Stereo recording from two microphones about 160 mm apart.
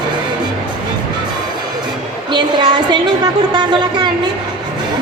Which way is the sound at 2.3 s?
25° right (ahead or behind).